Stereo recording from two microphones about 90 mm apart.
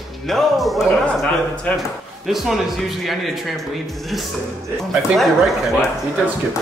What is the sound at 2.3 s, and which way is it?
Speech, centre (ahead or behind).